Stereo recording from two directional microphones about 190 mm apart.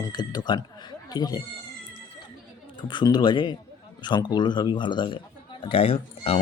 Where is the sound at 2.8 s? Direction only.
25° left (ahead or behind).